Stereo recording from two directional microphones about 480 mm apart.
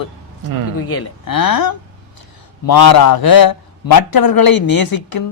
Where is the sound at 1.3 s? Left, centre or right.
Left.